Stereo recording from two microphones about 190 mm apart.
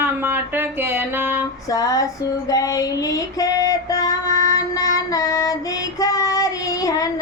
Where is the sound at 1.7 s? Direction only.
20° left (ahead or behind).